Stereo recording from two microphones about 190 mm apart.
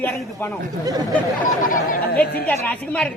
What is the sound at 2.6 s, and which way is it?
Speech, 5° left (ahead or behind).